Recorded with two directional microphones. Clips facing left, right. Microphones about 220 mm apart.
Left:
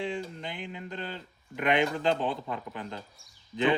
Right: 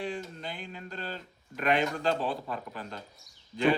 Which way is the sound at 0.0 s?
20° left (ahead or behind).